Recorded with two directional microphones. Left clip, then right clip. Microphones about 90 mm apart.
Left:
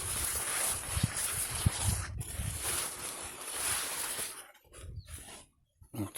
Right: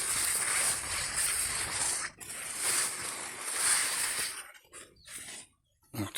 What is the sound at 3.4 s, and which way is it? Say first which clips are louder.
Boat: right 6 dB; 25° right (ahead or behind).